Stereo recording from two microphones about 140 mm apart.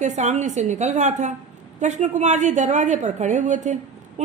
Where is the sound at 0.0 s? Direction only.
55° right (ahead or behind).